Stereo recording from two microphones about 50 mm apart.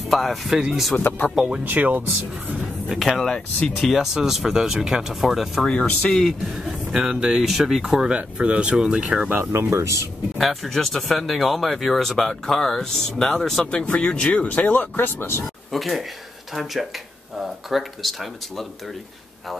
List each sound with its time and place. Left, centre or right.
0.1 s speech: centre
1.6 s speech: right
2.9 s speech: centre
5.7 s speech: centre
6.5 s speech: centre; by 9.3 s right
9.4 s speech: right
10.3 s speech: centre
13.8 s speech: left
15.0 s speech: left
15.7 s speech: centre
17.6 s speech: centre